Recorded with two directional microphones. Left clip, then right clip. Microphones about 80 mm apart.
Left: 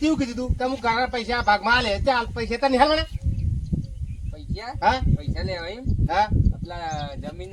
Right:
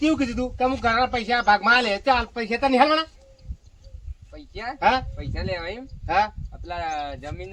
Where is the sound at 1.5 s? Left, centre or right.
Right.